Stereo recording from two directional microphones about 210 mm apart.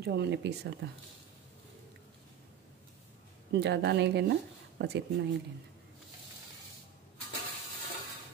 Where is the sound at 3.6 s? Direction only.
55° right (ahead or behind).